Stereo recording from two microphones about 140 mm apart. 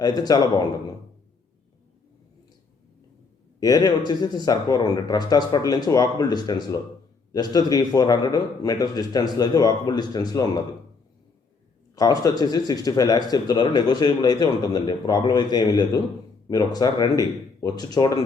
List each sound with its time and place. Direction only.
0.0 s a man's voice: 30° left (ahead or behind)
3.6 s a man's voice: 25° left (ahead or behind)
11.9 s a man's voice: 25° left (ahead or behind)